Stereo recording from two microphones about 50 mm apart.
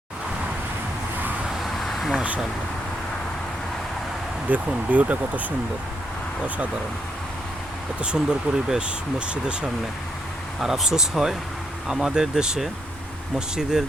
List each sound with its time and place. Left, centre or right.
1.8 s a sound: centre
4.5 s speech: right
8.0 s speech: centre
10.6 s speech: centre